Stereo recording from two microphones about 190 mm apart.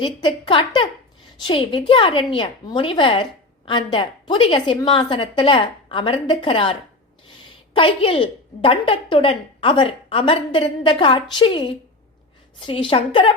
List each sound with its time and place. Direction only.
0.0 s a woman's voice: 25° left (ahead or behind)
7.8 s a woman's voice: 30° left (ahead or behind)